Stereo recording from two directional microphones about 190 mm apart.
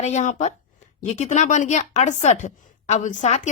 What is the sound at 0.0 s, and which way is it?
Speech, 40° left (ahead or behind).